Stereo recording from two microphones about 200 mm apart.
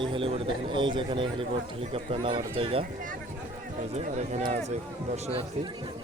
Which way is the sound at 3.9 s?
35° right (ahead or behind).